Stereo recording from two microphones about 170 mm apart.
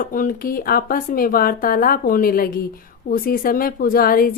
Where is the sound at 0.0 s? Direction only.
55° left (ahead or behind).